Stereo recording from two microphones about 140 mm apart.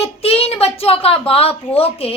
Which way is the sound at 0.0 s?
45° left (ahead or behind).